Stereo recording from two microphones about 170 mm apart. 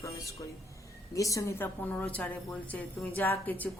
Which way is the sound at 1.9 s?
10° left (ahead or behind).